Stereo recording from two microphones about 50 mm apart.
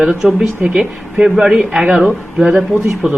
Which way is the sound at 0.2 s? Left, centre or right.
Centre.